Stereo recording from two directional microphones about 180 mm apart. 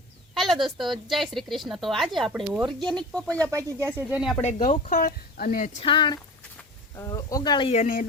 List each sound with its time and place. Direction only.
0.3 s a woman's voice: centre (ahead or behind)
3.5 s speech: 15° right (ahead or behind)
4.4 s speech: 40° left (ahead or behind)
5.8 s speech: 25° left (ahead or behind); by 8.0 s 45° left (ahead or behind)